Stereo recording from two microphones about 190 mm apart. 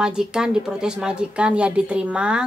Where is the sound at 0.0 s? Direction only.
5° right (ahead or behind).